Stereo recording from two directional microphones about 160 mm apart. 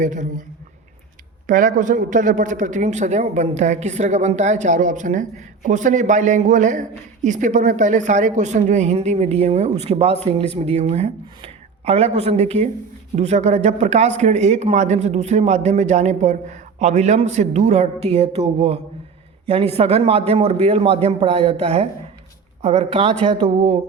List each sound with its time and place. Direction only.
0.0 s speech: 50° right (ahead or behind)
1.5 s a man's voice: 55° right (ahead or behind); by 23.6 s 25° right (ahead or behind)